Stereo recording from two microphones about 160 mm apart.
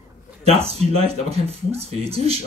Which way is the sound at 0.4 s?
40° right (ahead or behind).